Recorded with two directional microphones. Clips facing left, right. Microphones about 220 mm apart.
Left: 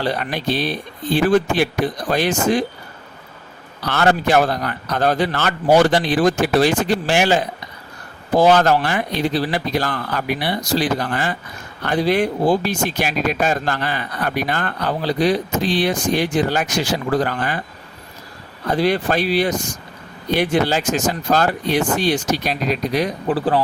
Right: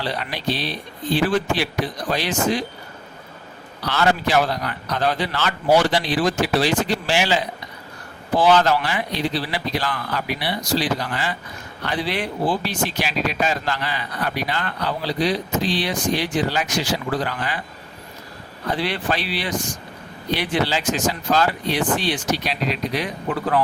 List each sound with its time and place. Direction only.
0.0 s speech: 50° left (ahead or behind)
3.8 s speech: 50° left (ahead or behind)
18.7 s speech: 45° left (ahead or behind)